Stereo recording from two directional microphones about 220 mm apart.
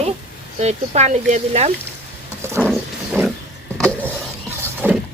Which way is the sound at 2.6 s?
10° left (ahead or behind).